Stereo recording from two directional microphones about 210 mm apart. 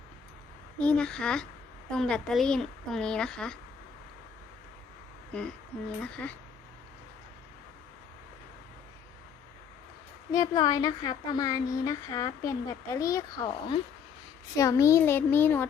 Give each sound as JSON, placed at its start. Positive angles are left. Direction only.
{"t": 0.8, "sound": "speech", "side_deg": 5}
{"t": 5.3, "sound": "speech", "side_deg": 5}
{"t": 10.3, "sound": "speech", "side_deg": 20}